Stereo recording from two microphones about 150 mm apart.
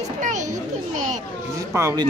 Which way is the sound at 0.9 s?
55° right (ahead or behind).